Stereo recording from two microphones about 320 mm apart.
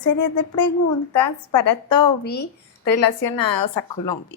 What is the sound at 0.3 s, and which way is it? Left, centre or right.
Speech, left.